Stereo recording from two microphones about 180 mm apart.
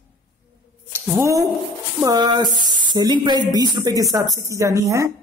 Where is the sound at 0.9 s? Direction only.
15° right (ahead or behind).